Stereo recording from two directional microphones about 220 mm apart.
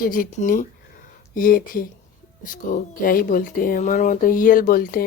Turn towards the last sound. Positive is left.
turn(degrees=40)  # may be behind; listen again after turning